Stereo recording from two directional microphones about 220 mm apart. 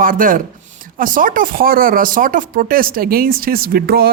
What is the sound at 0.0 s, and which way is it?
Speech, 40° right (ahead or behind).